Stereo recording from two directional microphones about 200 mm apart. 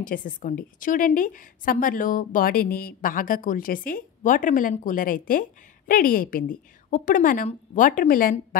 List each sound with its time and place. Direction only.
0.0 s a woman's voice: 45° left (ahead or behind)